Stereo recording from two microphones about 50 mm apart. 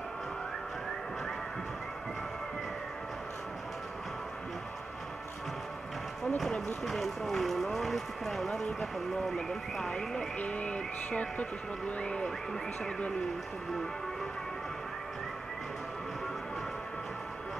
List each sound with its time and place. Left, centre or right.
6.2 s speech: centre
10.4 s music: left